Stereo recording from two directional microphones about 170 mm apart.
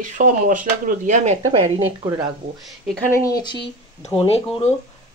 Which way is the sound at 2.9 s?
10° left (ahead or behind).